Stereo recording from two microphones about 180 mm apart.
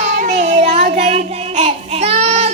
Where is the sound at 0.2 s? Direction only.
40° right (ahead or behind).